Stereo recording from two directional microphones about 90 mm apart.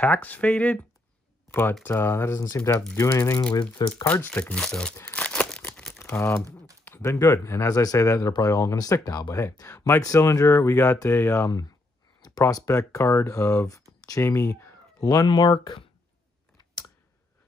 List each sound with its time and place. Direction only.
0.0 s speech: 20° left (ahead or behind)
4.0 s speech: 20° left (ahead or behind)
5.1 s crumpling: 15° left (ahead or behind)
5.9 s speech: 30° left (ahead or behind)
12.2 s speech: 45° left (ahead or behind)